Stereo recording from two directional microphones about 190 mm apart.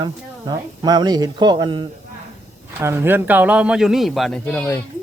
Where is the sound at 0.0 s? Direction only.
20° right (ahead or behind).